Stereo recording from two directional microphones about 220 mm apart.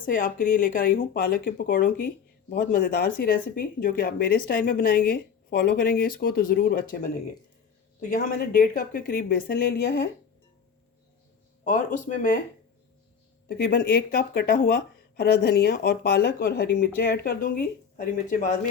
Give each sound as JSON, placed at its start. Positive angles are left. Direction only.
{"t": 0.0, "sound": "speech", "side_deg": 40}
{"t": 8.1, "sound": "speech", "side_deg": 40}
{"t": 12.0, "sound": "speech", "side_deg": 35}
{"t": 13.5, "sound": "speech", "side_deg": 40}